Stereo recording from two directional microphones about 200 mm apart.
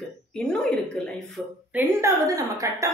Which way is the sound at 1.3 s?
10° right (ahead or behind).